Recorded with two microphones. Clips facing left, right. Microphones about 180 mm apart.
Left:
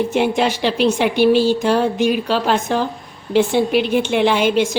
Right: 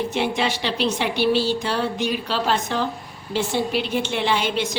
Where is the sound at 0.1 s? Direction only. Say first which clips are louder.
Left 6 dB; 50° left (ahead or behind).